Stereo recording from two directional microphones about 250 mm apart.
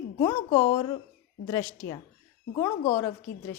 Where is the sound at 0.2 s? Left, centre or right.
Centre.